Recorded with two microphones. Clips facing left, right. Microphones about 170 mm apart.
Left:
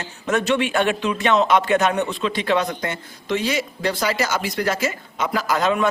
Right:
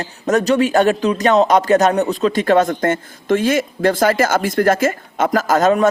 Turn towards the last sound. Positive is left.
turn(degrees=-45)  # may be behind; listen again after turning